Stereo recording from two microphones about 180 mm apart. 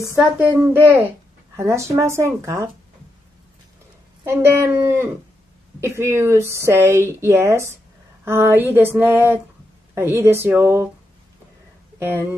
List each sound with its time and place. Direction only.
0.1 s speech: 10° right (ahead or behind)
4.2 s speech: 15° right (ahead or behind)